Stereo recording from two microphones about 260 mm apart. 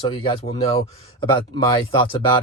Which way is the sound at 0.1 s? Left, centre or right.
Left.